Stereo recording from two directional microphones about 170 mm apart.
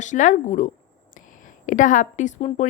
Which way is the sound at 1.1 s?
50° left (ahead or behind).